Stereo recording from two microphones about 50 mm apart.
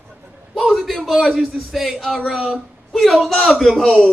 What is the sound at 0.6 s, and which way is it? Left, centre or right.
Speech, centre.